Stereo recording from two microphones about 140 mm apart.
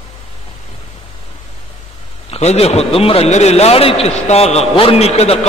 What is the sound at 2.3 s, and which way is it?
A man's voice, 50° left (ahead or behind).